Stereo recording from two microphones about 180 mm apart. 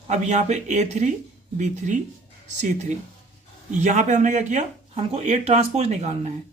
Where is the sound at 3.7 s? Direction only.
40° right (ahead or behind).